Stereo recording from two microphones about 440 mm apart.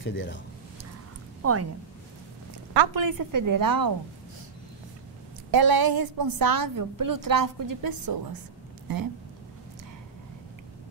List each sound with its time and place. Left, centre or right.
0.0 s speech: left
1.4 s a woman's voice: right
2.7 s a woman's voice: right
5.5 s a woman's voice: right